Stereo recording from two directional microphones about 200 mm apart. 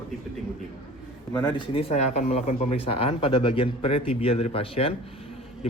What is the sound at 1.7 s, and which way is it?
Speech, 30° left (ahead or behind).